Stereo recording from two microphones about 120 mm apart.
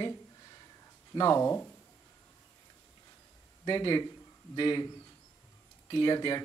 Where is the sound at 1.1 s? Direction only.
25° left (ahead or behind).